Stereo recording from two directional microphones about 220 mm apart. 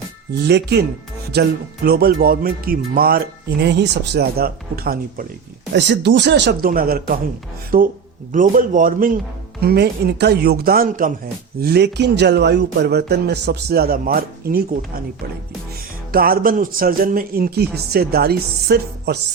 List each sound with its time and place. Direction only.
0.4 s speech: 50° right (ahead or behind)
16.1 s speech: 40° right (ahead or behind)